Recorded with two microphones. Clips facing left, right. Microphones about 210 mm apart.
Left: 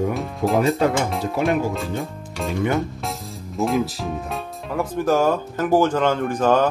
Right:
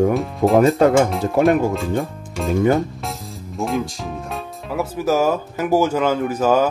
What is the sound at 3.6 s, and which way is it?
Speech, centre (ahead or behind).